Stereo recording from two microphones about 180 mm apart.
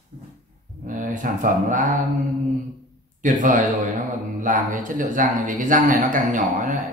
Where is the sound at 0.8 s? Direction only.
45° right (ahead or behind).